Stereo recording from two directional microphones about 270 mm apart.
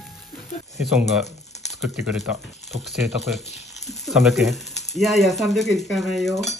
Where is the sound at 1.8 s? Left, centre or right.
Centre.